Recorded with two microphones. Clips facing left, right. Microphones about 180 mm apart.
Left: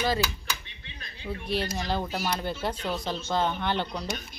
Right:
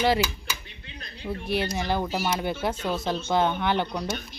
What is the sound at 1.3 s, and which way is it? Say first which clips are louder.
Speech: right 3 dB; 60° right (ahead or behind).